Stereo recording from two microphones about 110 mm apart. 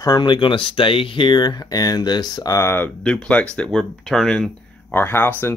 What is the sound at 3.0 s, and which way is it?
Speech, 5° left (ahead or behind).